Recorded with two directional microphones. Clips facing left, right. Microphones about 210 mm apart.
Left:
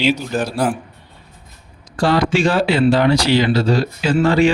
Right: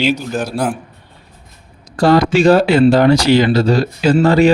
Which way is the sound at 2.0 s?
40° right (ahead or behind).